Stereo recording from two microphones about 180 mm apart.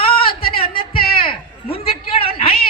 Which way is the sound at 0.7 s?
55° left (ahead or behind).